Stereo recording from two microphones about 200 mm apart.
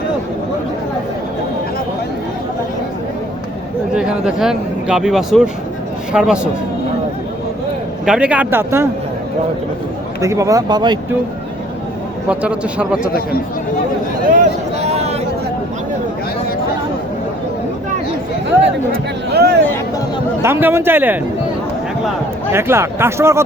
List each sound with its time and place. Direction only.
3.9 s a man's voice: 5° right (ahead or behind)
8.0 s speech: 5° right (ahead or behind)
10.2 s speech: 15° right (ahead or behind)
12.3 s a man's voice: 5° right (ahead or behind)
14.3 s a sound: 35° right (ahead or behind)
18.6 s a sound: 55° right (ahead or behind)
20.4 s speech: 10° right (ahead or behind)
22.5 s speech: 10° right (ahead or behind)